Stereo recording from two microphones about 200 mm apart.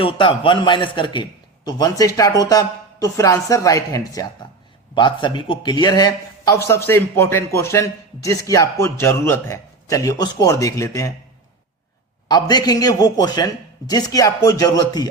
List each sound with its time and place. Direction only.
0.0 s a man's voice: 25° left (ahead or behind)
12.3 s a man's voice: 20° left (ahead or behind)